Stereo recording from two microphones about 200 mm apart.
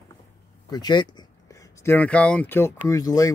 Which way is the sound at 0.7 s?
20° left (ahead or behind).